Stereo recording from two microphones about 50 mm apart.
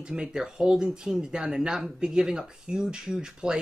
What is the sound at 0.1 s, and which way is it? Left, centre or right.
Speech, centre.